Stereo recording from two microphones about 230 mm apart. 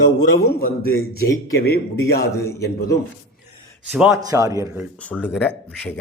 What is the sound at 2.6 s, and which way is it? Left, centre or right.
Mantra, left.